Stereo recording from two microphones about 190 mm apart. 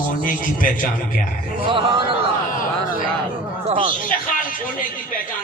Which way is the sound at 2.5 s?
45° left (ahead or behind).